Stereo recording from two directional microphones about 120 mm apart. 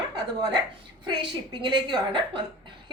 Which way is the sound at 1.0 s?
40° right (ahead or behind).